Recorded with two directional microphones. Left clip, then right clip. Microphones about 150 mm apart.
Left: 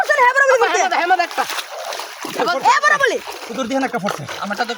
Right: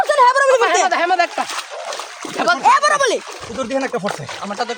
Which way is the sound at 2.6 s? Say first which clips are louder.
Even; 20° right (ahead or behind).